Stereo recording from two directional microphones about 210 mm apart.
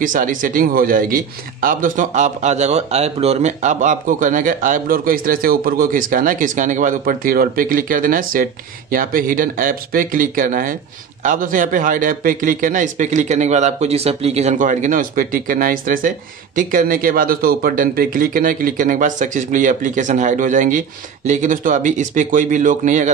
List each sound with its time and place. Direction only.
0.0 s a man's voice: 40° right (ahead or behind)